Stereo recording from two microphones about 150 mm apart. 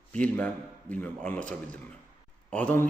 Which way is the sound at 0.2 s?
10° left (ahead or behind).